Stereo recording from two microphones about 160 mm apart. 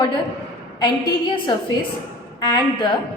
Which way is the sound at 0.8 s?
30° left (ahead or behind).